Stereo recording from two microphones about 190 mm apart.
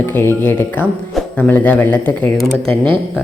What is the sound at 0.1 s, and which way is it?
Speech, 10° left (ahead or behind).